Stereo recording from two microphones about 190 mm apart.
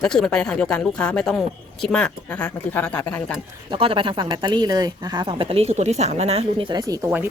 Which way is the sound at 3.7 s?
25° right (ahead or behind).